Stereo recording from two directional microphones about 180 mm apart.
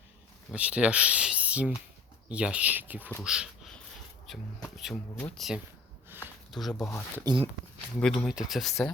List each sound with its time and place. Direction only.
0.5 s speech: 5° right (ahead or behind)
3.2 s a sound: 5° right (ahead or behind)
4.3 s speech: centre (ahead or behind)
6.7 s speech: 15° left (ahead or behind)
7.3 s speech: 20° right (ahead or behind)
7.9 s speech: 5° left (ahead or behind)